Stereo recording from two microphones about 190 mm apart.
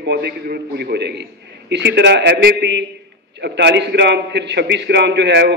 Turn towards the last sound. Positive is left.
turn(degrees=-65)  # may be behind; listen again after turning